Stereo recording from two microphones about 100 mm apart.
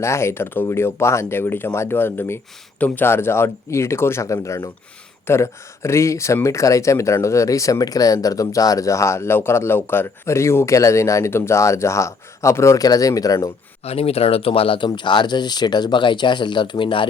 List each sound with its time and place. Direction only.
0.0 s speech: 25° left (ahead or behind)
13.8 s speech: 80° left; by 17.1 s 55° left (ahead or behind)